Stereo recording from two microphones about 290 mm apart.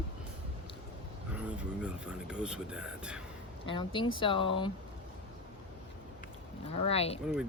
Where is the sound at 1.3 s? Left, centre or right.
Centre.